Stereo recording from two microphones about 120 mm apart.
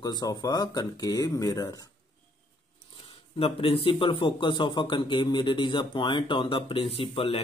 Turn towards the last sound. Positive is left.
turn(degrees=50)  # may be behind; listen again after turning